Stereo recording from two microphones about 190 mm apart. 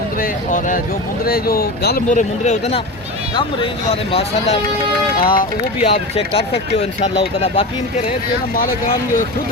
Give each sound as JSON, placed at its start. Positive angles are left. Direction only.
{"t": 0.2, "sound": "speech", "side_deg": 45}
{"t": 2.0, "sound": "speech", "side_deg": 40}
{"t": 4.1, "sound": "speech", "side_deg": 30}
{"t": 5.2, "sound": "speech", "side_deg": 50}
{"t": 5.8, "sound": "speech", "side_deg": 30}